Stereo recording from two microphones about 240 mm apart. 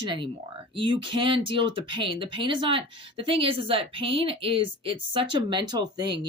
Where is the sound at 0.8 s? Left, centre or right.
Right.